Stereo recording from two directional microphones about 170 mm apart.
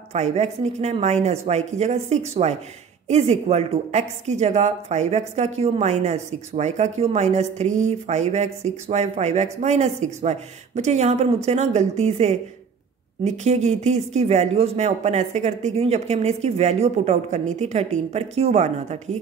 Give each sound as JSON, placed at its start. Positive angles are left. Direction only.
{"t": 0.1, "sound": "a woman's voice", "side_deg": -40}